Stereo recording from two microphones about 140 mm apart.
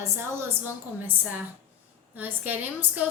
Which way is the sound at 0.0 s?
20° right (ahead or behind).